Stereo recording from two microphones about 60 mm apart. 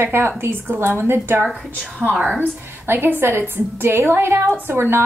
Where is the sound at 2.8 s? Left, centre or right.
Right.